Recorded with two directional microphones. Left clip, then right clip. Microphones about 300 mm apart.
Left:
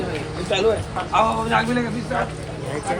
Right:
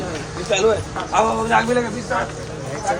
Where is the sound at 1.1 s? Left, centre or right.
Right.